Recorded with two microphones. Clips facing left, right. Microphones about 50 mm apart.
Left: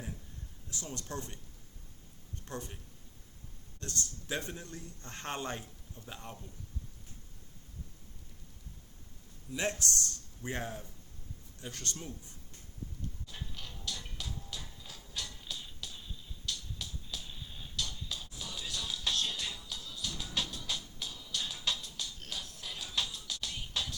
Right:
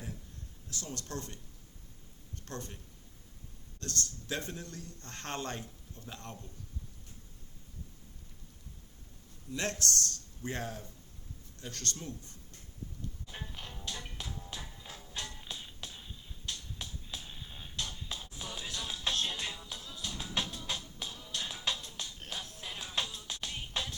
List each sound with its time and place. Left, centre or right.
0.9 s speech: centre
2.4 s speech: centre
3.8 s speech: left
9.5 s speech: centre
13.2 s music: right
16.5 s a sound: right